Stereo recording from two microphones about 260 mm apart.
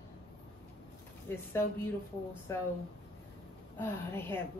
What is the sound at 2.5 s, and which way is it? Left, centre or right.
Speech, centre.